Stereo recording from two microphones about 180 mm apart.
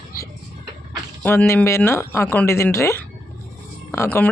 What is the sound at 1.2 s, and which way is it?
Speech, 10° left (ahead or behind).